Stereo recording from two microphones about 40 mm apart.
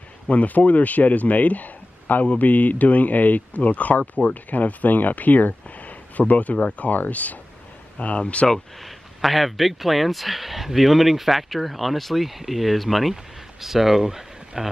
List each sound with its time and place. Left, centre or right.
0.3 s speech: left
8.5 s speech: centre